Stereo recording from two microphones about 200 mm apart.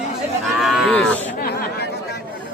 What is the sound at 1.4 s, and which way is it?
Chatter, 50° left (ahead or behind).